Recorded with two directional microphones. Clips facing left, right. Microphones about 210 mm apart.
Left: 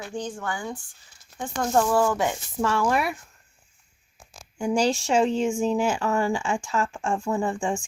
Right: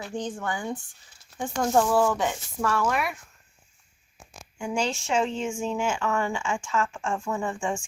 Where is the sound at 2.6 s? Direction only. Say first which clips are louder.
Left 2 dB; 25° left (ahead or behind).